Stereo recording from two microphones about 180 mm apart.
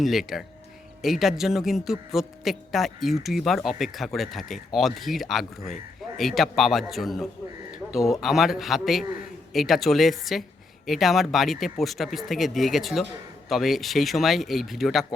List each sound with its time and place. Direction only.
0.0 s a man's voice: centre (ahead or behind)